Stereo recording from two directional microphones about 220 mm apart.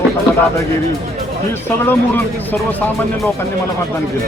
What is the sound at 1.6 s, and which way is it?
Speech, 10° left (ahead or behind).